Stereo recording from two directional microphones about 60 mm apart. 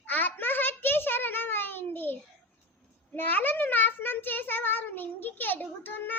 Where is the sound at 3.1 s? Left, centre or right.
Left.